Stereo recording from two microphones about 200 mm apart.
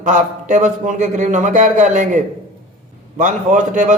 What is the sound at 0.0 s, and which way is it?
A man's voice, 40° right (ahead or behind).